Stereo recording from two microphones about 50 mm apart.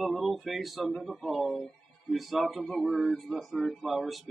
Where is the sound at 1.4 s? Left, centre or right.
Centre.